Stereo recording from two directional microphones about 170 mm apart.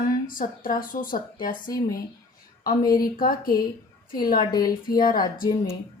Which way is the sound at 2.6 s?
60° left (ahead or behind).